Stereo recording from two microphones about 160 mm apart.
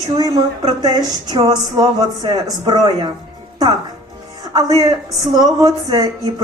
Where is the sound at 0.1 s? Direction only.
25° right (ahead or behind).